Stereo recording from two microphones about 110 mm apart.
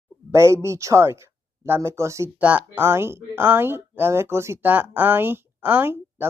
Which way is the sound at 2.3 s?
15° right (ahead or behind).